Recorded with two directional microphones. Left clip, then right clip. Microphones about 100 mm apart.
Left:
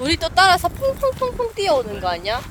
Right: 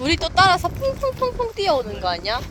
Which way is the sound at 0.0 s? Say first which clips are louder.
Left 1 dB; 15° left (ahead or behind).